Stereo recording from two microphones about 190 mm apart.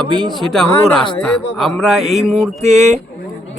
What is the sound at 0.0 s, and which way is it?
Speech, 5° left (ahead or behind).